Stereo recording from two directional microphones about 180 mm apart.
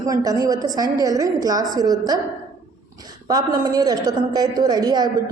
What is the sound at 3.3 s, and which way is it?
A woman's voice, 20° right (ahead or behind).